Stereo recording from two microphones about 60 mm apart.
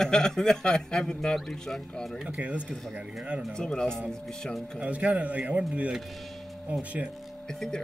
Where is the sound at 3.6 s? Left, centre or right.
Centre.